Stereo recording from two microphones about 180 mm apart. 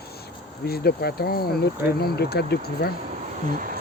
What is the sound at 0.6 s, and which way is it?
Speech, 60° left (ahead or behind).